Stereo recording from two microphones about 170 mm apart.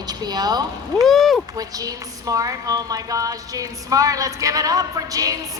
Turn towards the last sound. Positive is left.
turn(degrees=-20)  # may be behind; listen again after turning